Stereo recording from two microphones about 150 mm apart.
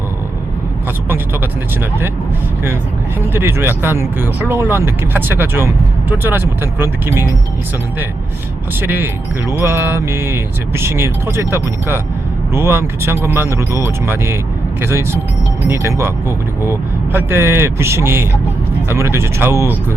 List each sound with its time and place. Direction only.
3.2 s speech: 15° right (ahead or behind)
8.8 s speech: 15° right (ahead or behind)